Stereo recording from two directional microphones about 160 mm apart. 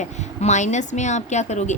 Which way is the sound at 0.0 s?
45° left (ahead or behind).